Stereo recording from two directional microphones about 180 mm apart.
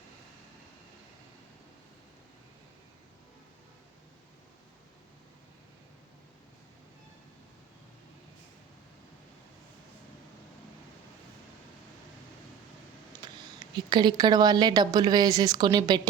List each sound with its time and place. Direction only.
13.2 s a woman's voice: 25° right (ahead or behind)